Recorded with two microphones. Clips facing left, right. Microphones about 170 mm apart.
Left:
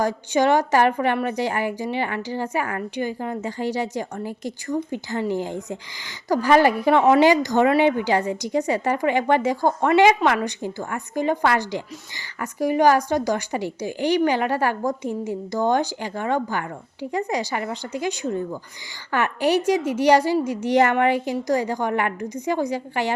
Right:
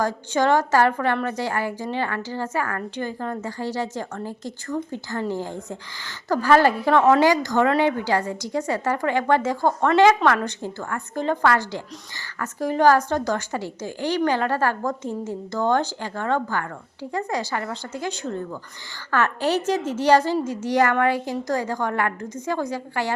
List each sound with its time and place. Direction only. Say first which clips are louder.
0.0 s a woman's voice: left 2 dB; 15° left (ahead or behind)